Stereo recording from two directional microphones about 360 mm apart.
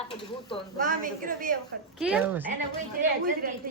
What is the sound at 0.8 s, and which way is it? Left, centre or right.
Speech, right.